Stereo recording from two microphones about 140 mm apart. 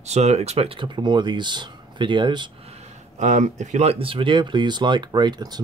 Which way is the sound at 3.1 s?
60° right (ahead or behind).